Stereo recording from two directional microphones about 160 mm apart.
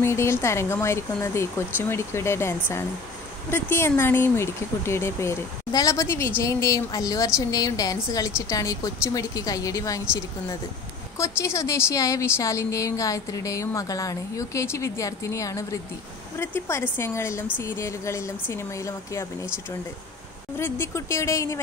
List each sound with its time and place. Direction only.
0.0 s a woman's voice: 15° left (ahead or behind)
11.1 s a woman's voice: 15° left (ahead or behind)
20.5 s speech: 15° left (ahead or behind)